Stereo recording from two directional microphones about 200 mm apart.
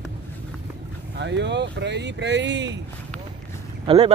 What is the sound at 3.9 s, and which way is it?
Speech, 30° right (ahead or behind).